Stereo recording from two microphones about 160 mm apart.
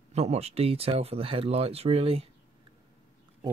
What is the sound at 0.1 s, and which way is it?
Speech, 40° right (ahead or behind).